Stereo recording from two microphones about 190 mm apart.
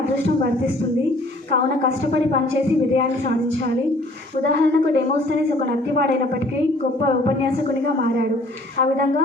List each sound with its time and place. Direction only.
4.4 s a woman's voice: 65° right (ahead or behind)